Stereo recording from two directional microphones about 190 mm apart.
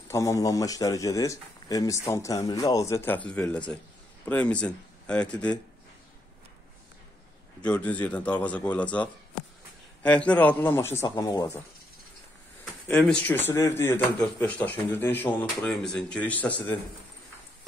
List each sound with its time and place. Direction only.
0.1 s a man's voice: 15° left (ahead or behind)
7.6 s a man's voice: 5° left (ahead or behind)
12.8 s a man's voice: 10° left (ahead or behind)